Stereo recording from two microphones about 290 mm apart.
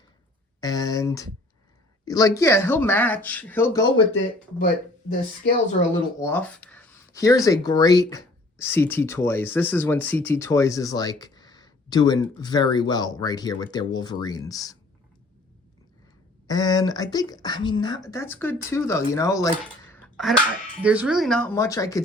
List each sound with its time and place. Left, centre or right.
0.6 s speech: centre
4.1 s speech: left
6.1 s speech: centre
16.5 s speech: centre
19.9 s a sound: centre
20.8 s speech: centre